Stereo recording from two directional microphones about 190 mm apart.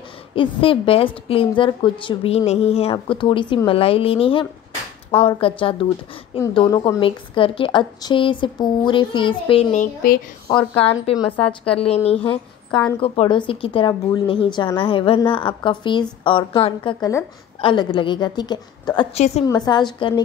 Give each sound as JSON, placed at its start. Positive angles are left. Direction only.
{"t": 0.3, "sound": "a woman's voice", "side_deg": 30}
{"t": 19.1, "sound": "a woman's voice", "side_deg": 35}
{"t": 19.4, "sound": "a woman's voice", "side_deg": 20}